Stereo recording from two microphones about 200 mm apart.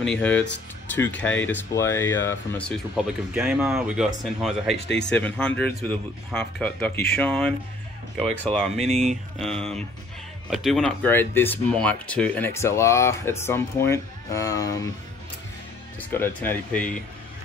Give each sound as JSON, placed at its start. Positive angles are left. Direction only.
{"t": 0.0, "sound": "speech", "side_deg": 5}
{"t": 3.0, "sound": "speech", "side_deg": 0}
{"t": 4.8, "sound": "speech", "side_deg": 60}
{"t": 5.1, "sound": "speech", "side_deg": 10}
{"t": 8.7, "sound": "speech", "side_deg": -35}
{"t": 9.4, "sound": "speech", "side_deg": 0}
{"t": 16.1, "sound": "speech", "side_deg": 10}